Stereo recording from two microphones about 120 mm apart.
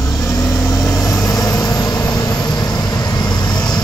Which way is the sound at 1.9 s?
30° left (ahead or behind).